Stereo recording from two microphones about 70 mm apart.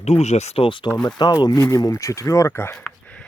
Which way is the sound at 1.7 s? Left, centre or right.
Left.